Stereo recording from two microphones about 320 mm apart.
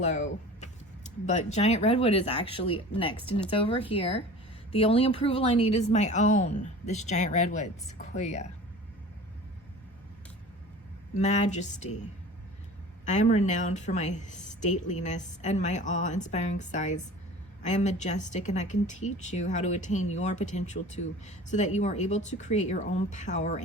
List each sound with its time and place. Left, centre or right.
0.0 s a woman's voice: left
11.2 s a woman's voice: left
13.1 s a woman's voice: left